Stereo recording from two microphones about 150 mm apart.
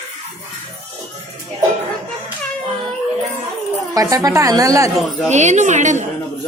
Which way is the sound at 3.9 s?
25° right (ahead or behind).